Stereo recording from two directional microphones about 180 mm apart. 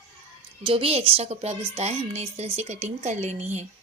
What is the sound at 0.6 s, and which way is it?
A woman's voice, 30° right (ahead or behind).